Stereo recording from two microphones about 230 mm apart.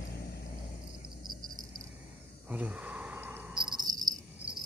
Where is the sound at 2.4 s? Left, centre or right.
Centre.